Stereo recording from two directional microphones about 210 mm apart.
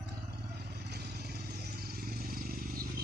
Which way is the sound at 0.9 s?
50° right (ahead or behind).